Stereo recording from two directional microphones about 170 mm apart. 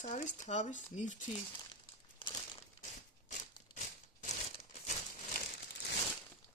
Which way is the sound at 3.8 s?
45° left (ahead or behind).